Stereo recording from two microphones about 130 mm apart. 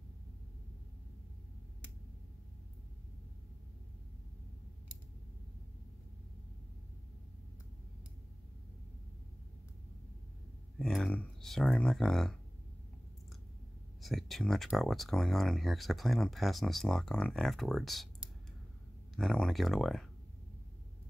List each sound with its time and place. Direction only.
10.8 s speech: 5° left (ahead or behind)
14.0 s speech: centre (ahead or behind)
19.1 s speech: 5° left (ahead or behind)